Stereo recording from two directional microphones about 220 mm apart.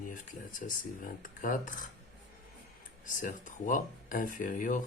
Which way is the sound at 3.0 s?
35° left (ahead or behind).